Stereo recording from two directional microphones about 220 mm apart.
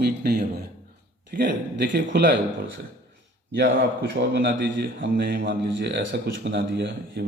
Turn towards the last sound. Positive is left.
turn(degrees=-50)  # may be behind; listen again after turning